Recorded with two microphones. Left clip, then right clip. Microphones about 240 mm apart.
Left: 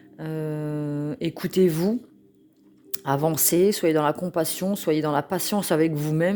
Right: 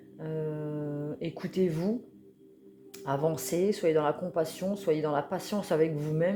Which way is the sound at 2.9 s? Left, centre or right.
Left.